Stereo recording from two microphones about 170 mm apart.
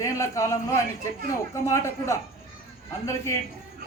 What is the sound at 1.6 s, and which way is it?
Speech, 15° left (ahead or behind).